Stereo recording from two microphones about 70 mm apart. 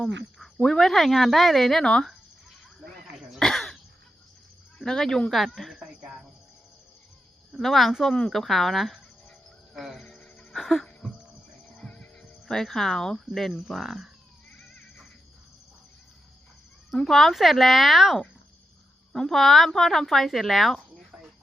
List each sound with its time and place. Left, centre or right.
0.0 s cricket: centre
0.6 s speech: centre
3.3 s throat clearing: centre
4.8 s speech: centre
5.7 s speech: centre
7.5 s speech: centre
11.7 s music: centre
13.1 s speech: centre
17.0 s speech: centre